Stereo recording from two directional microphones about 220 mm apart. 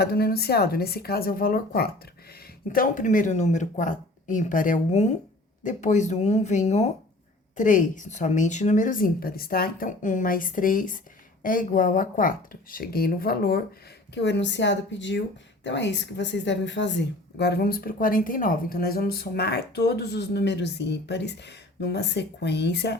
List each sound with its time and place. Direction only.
0.0 s a woman's voice: 45° left (ahead or behind)